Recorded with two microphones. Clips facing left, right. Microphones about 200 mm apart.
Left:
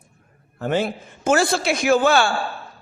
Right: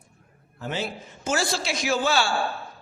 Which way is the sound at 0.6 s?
55° left (ahead or behind).